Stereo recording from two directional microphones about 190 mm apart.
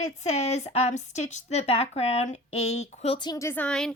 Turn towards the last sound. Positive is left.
turn(degrees=5)  # may be behind; listen again after turning